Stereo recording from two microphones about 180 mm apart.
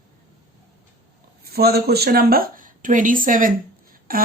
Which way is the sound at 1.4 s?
60° right (ahead or behind).